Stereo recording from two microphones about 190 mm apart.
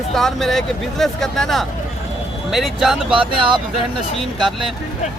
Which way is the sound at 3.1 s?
25° right (ahead or behind).